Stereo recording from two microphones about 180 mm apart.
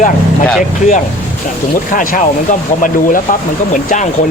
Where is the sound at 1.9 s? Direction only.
50° left (ahead or behind).